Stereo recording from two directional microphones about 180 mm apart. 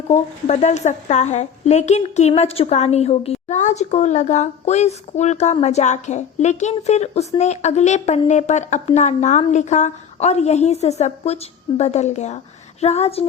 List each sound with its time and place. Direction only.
0.1 s a woman's voice: 40° left (ahead or behind)